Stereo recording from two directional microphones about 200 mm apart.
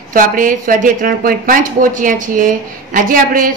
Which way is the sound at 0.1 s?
45° right (ahead or behind).